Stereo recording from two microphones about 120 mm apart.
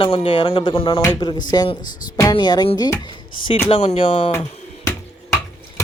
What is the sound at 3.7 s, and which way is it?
Speech, 55° left (ahead or behind).